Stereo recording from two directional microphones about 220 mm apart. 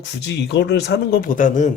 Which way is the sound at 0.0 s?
50° left (ahead or behind).